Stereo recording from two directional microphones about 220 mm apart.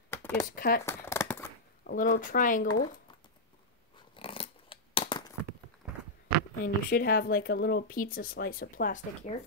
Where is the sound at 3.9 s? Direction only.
25° left (ahead or behind).